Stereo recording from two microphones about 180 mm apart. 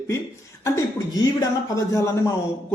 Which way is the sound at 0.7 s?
20° left (ahead or behind).